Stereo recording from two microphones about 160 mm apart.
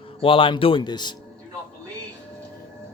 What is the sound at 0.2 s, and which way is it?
Speech, 35° left (ahead or behind).